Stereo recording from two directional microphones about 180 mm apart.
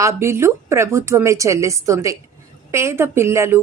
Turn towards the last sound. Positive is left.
turn(degrees=-15)  # may be behind; listen again after turning